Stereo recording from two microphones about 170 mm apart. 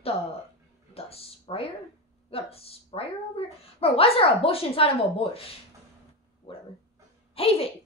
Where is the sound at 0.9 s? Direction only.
35° left (ahead or behind).